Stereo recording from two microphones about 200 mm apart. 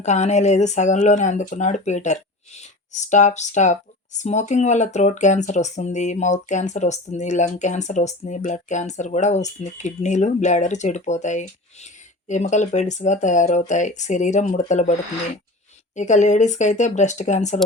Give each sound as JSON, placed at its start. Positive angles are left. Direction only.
{"t": 0.0, "sound": "speech", "side_deg": 35}
{"t": 16.0, "sound": "speech", "side_deg": 35}